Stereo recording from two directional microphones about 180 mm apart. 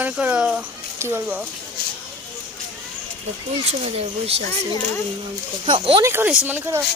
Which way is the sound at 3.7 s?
35° right (ahead or behind).